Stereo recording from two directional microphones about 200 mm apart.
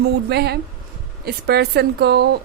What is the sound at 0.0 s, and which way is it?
A woman's voice, 55° right (ahead or behind).